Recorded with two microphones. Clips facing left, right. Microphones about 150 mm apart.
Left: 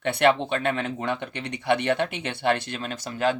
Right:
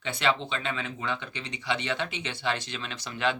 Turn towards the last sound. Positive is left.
turn(degrees=45)  # may be behind; listen again after turning